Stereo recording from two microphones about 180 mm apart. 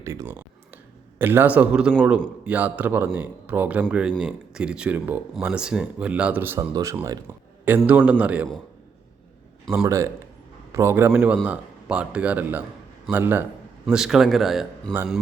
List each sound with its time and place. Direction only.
0.0 s a sound: 15° right (ahead or behind)
1.2 s speech: 10° right (ahead or behind)
9.8 s a man's voice: 15° right (ahead or behind); by 14.9 s centre (ahead or behind)